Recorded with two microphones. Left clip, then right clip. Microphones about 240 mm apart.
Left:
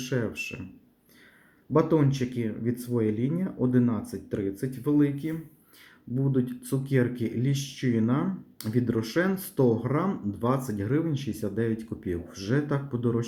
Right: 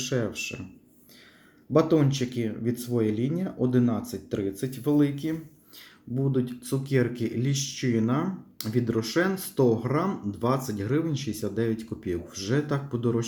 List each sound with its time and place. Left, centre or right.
0.0 s speech: centre
1.7 s speech: centre